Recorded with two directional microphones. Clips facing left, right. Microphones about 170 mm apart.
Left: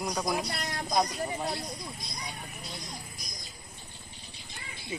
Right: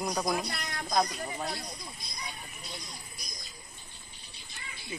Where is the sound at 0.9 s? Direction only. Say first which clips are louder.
Left 1 dB; 20° left (ahead or behind).